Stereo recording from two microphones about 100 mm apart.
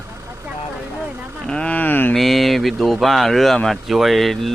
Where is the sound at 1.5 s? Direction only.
10° left (ahead or behind).